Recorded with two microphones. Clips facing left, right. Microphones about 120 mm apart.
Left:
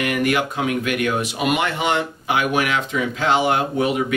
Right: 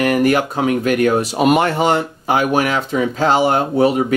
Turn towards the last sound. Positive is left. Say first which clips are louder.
# right 5 dB
turn(degrees=-35)  # may be behind; listen again after turning